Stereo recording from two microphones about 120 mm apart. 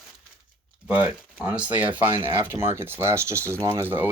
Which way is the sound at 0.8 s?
10° right (ahead or behind).